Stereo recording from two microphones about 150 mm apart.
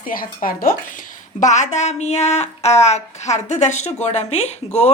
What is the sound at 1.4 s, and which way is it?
Speech, 50° left (ahead or behind).